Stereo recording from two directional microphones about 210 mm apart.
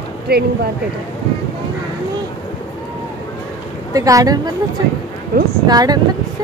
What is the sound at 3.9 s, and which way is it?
Speech, 15° right (ahead or behind).